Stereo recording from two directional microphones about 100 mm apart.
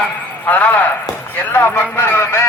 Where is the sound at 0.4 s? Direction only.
20° left (ahead or behind).